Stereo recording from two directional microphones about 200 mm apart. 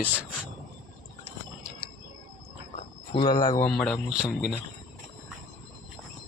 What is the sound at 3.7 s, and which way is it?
Speech, 5° left (ahead or behind).